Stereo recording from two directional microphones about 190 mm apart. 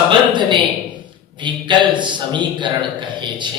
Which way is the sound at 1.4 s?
25° right (ahead or behind).